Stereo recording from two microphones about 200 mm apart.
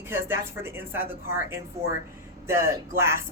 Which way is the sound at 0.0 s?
10° right (ahead or behind).